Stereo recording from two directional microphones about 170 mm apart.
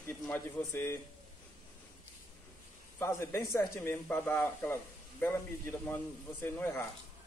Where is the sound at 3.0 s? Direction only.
15° left (ahead or behind).